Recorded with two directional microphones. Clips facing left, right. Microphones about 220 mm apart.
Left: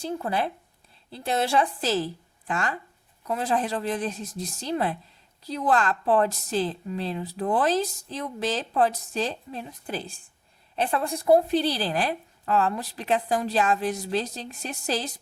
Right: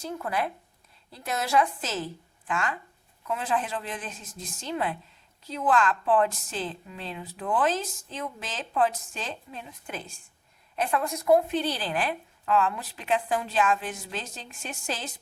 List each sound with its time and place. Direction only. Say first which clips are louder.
0.0 s a woman's voice: left 3 dB; 30° left (ahead or behind)